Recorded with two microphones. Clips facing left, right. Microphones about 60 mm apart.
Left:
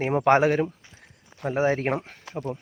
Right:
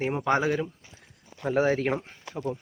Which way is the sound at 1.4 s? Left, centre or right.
Centre.